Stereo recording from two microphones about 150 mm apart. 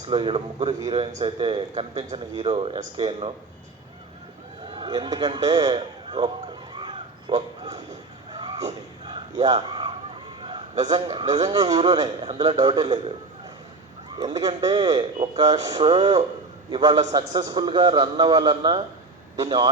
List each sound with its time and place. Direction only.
0.1 s a man's voice: 35° right (ahead or behind)
4.7 s a man's voice: 30° right (ahead or behind)
6.7 s crow: 30° right (ahead or behind)
8.3 s a sound: 30° right (ahead or behind)
10.4 s a man's voice: 30° right (ahead or behind)
14.2 s a man's voice: 25° right (ahead or behind)